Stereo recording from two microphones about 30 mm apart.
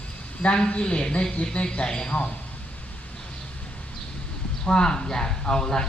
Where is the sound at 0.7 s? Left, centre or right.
Left.